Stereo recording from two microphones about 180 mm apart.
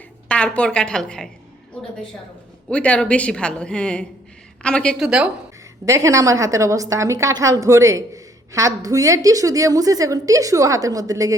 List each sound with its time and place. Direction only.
0.3 s speech: 5° left (ahead or behind)
2.6 s speech: 5° left (ahead or behind)
5.8 s a woman's voice: 15° right (ahead or behind)